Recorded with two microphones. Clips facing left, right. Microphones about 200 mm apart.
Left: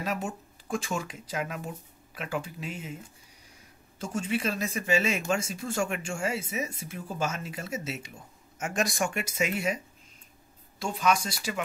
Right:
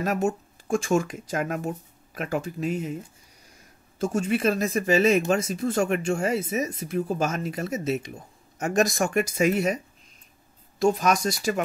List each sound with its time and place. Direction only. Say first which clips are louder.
0.0 s speech: right 8 dB; 45° right (ahead or behind)
4.0 s speech: right 7 dB; 45° right (ahead or behind)
10.8 s speech: right 6 dB; 45° right (ahead or behind)